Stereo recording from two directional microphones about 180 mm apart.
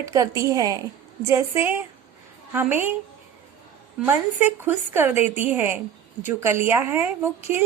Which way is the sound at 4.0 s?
10° right (ahead or behind).